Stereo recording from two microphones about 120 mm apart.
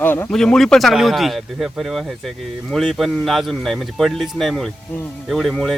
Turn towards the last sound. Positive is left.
turn(degrees=0)  # may be behind; listen again after turning